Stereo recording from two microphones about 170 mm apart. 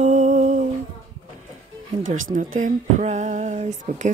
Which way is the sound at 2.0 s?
50° right (ahead or behind).